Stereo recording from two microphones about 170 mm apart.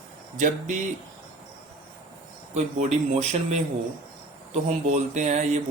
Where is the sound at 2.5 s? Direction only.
45° right (ahead or behind).